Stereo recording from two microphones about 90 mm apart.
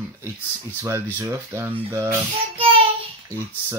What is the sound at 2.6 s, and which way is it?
Child singing, 80° right.